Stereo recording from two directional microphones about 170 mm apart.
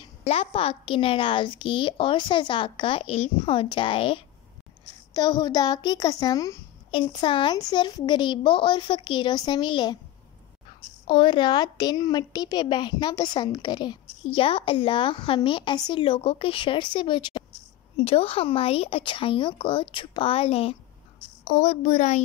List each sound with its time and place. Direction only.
0.0 s a child's voice: 35° left (ahead or behind)
11.1 s a woman's voice: 30° left (ahead or behind); by 22.2 s 45° left (ahead or behind)